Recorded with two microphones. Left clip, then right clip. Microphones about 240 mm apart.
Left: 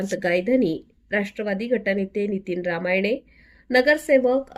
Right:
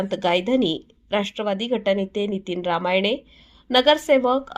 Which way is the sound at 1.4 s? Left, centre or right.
Right.